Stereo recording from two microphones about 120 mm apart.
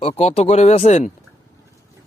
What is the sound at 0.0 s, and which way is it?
Speech, 60° left (ahead or behind).